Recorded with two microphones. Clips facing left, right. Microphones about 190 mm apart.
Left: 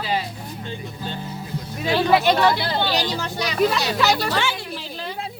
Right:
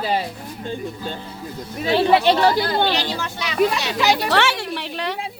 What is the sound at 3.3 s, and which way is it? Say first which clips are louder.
Speech: right 1 dB; 40° left (ahead or behind).